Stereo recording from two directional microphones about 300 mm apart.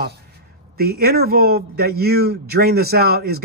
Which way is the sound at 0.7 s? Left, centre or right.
Right.